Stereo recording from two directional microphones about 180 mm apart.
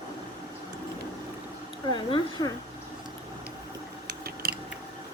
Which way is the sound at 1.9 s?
25° left (ahead or behind).